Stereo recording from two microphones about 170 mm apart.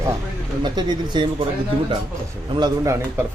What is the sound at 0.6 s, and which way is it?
Speech, 25° right (ahead or behind).